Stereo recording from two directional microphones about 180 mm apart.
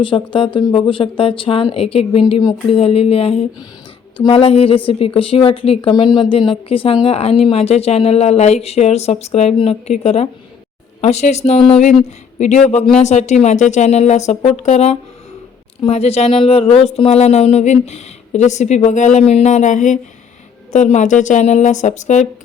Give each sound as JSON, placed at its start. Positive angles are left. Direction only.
{"t": 0.0, "sound": "speech", "side_deg": 30}